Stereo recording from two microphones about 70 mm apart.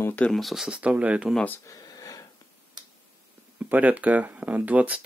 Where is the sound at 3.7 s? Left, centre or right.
Right.